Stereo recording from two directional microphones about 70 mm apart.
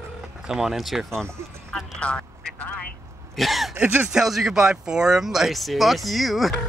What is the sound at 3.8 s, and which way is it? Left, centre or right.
Speech, centre.